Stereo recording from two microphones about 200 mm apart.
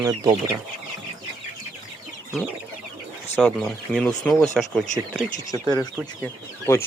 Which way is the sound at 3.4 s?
5° left (ahead or behind).